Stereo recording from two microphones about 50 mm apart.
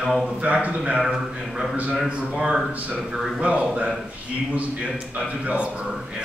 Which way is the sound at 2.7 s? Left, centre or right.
Right.